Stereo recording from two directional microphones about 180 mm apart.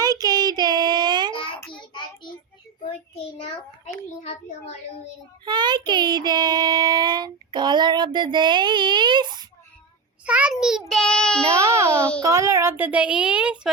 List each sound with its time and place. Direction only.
0.0 s child singing: 20° right (ahead or behind)
1.3 s child singing: 30° left (ahead or behind)
4.2 s a child's voice: 35° left (ahead or behind)
5.5 s child singing: 25° right (ahead or behind)
10.2 s a child's voice: 5° right (ahead or behind)
11.5 s a child's voice: 15° right (ahead or behind)